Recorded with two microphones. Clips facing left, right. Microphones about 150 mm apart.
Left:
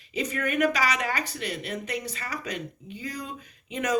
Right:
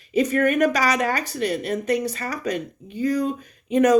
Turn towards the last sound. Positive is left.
turn(degrees=-45)  # may be behind; listen again after turning